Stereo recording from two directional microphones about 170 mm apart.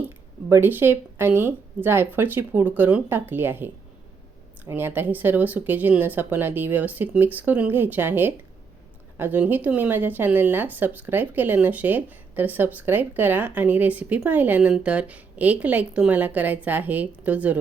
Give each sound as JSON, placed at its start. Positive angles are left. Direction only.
{"t": 0.5, "sound": "speech", "side_deg": -10}